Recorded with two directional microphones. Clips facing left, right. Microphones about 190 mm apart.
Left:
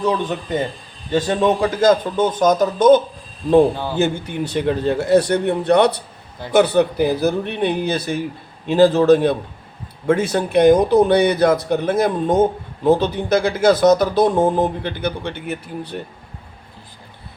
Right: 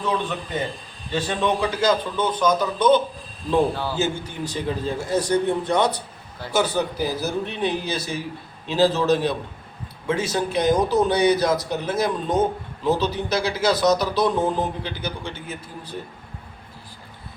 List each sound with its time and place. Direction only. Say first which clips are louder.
1.1 s speech: left 6 dB; 45° left (ahead or behind)
3.9 s speech: left 6 dB; 60° left (ahead or behind)